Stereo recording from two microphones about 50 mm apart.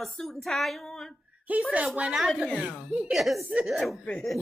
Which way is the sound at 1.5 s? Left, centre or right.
Right.